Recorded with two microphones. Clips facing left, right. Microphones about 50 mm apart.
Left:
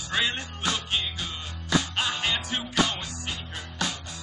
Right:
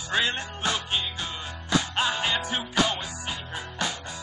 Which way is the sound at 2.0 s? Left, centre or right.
Centre.